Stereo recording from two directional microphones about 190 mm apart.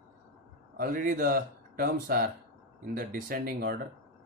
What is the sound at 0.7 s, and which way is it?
Speech, 50° right (ahead or behind).